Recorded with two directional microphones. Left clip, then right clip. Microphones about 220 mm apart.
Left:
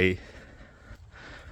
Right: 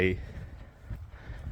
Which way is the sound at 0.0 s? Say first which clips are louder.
Left 3 dB; 30° left (ahead or behind).